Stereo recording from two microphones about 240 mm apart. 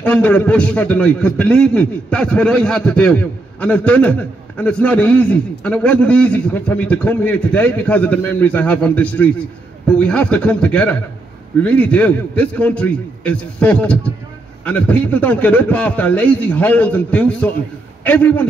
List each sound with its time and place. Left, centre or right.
0.0 s a man's voice: centre